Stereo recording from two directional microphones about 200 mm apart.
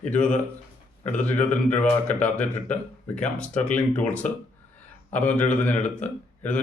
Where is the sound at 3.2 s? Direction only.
5° left (ahead or behind).